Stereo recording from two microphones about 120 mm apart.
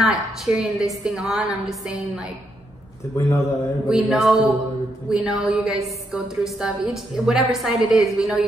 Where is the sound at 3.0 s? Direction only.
25° left (ahead or behind).